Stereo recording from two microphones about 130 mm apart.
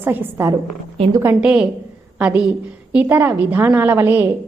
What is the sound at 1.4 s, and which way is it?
A woman's voice, 10° right (ahead or behind).